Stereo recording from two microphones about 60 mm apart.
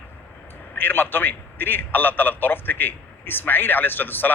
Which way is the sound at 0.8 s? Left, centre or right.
Left.